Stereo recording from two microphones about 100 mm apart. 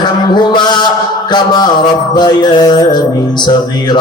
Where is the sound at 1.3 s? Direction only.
45° left (ahead or behind).